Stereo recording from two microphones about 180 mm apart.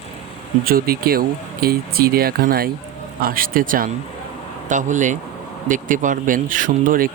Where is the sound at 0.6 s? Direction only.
55° right (ahead or behind).